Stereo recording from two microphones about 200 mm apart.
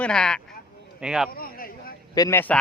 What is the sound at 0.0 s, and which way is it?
Speech, 5° left (ahead or behind).